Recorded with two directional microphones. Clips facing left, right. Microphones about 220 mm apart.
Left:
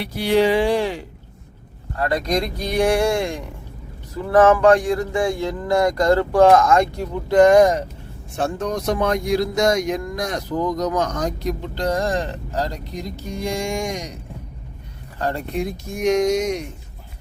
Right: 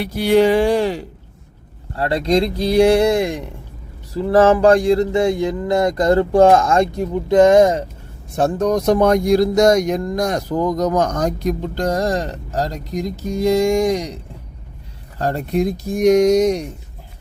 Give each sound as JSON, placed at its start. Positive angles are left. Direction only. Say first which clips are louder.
{"t": 0.0, "sound": "speech", "louder": "right 4 dB", "side_deg": -45}
{"t": 2.0, "sound": "speech", "louder": "right 4 dB", "side_deg": -25}
{"t": 4.1, "sound": "speech", "louder": "right 2 dB", "side_deg": -30}
{"t": 8.4, "sound": "speech", "louder": "right 6 dB", "side_deg": -40}
{"t": 15.2, "sound": "speech", "louder": "right 5 dB", "side_deg": -40}